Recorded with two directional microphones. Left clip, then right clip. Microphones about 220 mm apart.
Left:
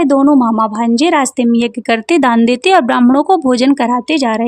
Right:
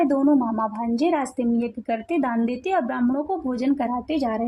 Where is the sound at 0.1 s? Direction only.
45° left (ahead or behind).